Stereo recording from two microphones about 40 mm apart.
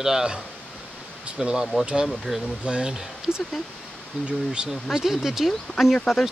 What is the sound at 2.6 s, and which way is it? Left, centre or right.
Speech, right.